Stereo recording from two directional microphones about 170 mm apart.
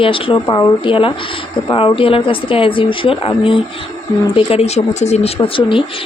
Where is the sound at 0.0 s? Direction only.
30° left (ahead or behind).